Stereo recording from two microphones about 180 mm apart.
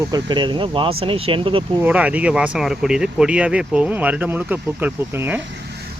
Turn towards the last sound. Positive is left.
turn(degrees=-10)  # may be behind; listen again after turning